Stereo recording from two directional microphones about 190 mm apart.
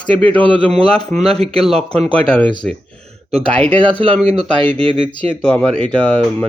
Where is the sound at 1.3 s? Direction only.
30° right (ahead or behind).